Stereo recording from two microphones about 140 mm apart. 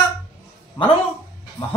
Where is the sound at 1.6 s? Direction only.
40° left (ahead or behind).